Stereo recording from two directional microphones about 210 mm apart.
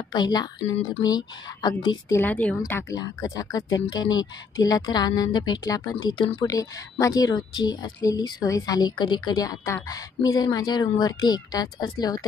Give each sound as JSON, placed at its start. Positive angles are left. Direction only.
{"t": 0.1, "sound": "a woman's voice", "side_deg": 20}
{"t": 2.6, "sound": "a woman's voice", "side_deg": 15}